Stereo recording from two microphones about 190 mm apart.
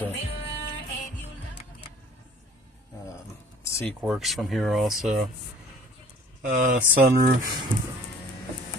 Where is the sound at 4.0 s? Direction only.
Centre (ahead or behind).